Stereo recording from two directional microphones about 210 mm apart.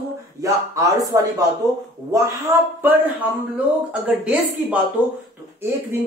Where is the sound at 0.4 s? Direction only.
15° right (ahead or behind).